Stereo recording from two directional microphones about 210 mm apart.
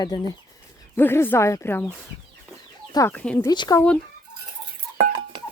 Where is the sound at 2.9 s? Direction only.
10° left (ahead or behind).